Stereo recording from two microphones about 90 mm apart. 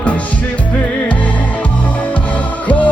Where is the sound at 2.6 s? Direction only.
15° left (ahead or behind).